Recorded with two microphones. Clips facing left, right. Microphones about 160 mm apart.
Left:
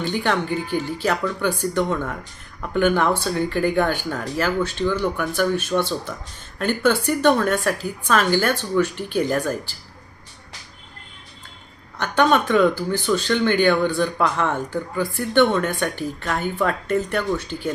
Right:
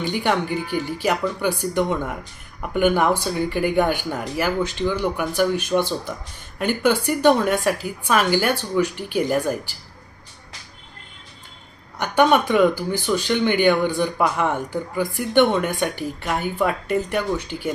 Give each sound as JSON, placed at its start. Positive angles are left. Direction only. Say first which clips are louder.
{"t": 0.0, "sound": "speech", "louder": "even", "side_deg": -15}
{"t": 11.9, "sound": "speech", "louder": "right 1 dB", "side_deg": -10}